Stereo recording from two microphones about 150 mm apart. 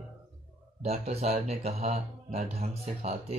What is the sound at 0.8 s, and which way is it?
Speech, 45° right (ahead or behind).